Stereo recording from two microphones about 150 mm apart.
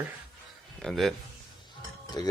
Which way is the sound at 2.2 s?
30° left (ahead or behind).